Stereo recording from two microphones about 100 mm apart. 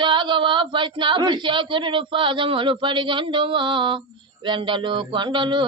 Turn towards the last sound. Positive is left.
turn(degrees=-50)  # may be behind; listen again after turning